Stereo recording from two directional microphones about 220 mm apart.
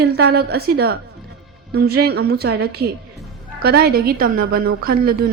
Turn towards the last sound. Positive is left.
turn(degrees=-45)  # may be behind; listen again after turning